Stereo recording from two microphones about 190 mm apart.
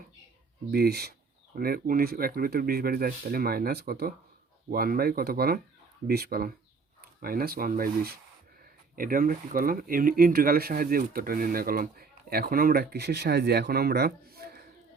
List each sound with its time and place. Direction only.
0.7 s speech: 55° right (ahead or behind)